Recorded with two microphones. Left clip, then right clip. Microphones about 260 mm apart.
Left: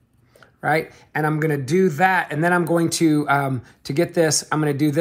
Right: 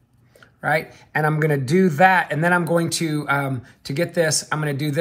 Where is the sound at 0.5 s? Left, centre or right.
Centre.